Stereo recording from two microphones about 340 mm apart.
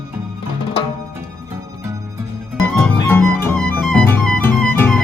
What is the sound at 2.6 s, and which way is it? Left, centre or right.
Music, centre.